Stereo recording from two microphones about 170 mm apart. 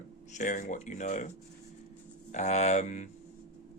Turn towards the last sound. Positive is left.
turn(degrees=45)  # may be behind; listen again after turning